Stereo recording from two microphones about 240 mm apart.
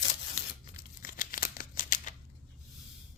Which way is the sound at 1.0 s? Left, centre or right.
Left.